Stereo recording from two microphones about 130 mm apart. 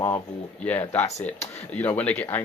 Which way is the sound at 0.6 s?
10° left (ahead or behind).